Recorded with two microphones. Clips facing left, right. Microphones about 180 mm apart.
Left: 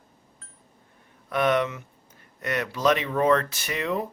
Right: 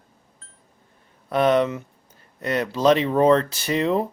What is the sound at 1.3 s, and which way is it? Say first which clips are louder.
Speech: right 5 dB; 30° right (ahead or behind).